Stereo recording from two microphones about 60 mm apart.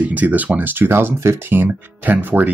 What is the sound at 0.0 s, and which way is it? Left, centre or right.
Speech, right.